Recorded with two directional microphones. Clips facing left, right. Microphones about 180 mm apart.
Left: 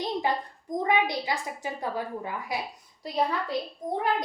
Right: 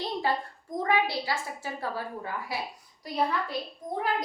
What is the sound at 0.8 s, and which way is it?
A woman's voice, 20° left (ahead or behind).